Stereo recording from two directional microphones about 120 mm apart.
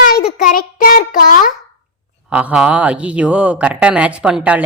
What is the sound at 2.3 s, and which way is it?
A woman's voice, 10° right (ahead or behind).